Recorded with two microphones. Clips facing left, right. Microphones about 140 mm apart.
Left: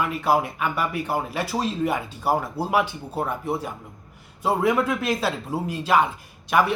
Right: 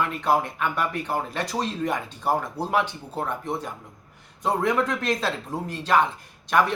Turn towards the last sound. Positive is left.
turn(degrees=10)  # may be behind; listen again after turning